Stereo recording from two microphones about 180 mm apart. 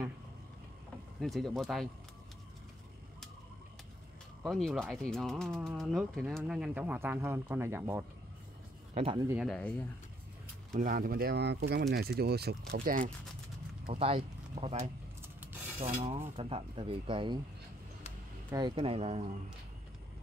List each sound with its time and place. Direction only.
1.2 s speech: centre (ahead or behind)
4.4 s speech: centre (ahead or behind)
8.9 s speech: 30° right (ahead or behind)
9.4 s speech: 5° left (ahead or behind)
10.7 s speech: 45° right (ahead or behind)
13.8 s speech: 30° right (ahead or behind)
18.5 s speech: 25° right (ahead or behind)